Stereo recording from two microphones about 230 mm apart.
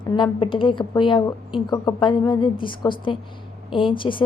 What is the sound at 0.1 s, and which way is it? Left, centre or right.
A woman's voice, left.